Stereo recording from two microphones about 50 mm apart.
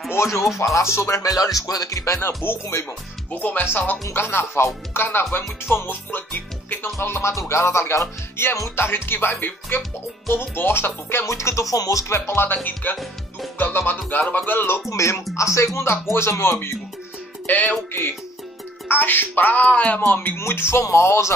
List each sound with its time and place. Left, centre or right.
0.1 s speech: left
0.6 s speech: left
3.3 s speech: left
6.1 s speech: left
8.7 s speech: left
11.2 s speech: left
12.9 s speech: centre
13.6 s music: left
14.3 s speech: left
14.9 s speech: left
17.5 s speech: left
18.9 s speech: left
19.6 s speech: left
20.3 s speech: left